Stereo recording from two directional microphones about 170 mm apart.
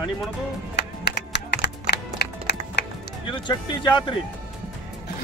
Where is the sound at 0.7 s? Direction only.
75° left (ahead or behind).